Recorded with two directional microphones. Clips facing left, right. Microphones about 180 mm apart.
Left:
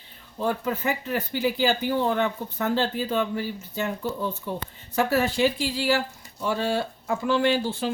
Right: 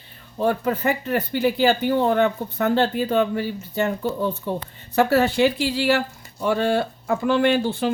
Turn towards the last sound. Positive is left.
turn(degrees=-60)  # may be behind; listen again after turning